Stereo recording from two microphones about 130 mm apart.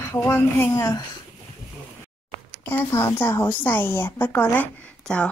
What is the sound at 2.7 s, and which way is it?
Speech, 15° left (ahead or behind).